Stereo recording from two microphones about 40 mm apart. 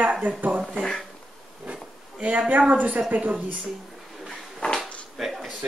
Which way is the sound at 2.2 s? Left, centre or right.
Right.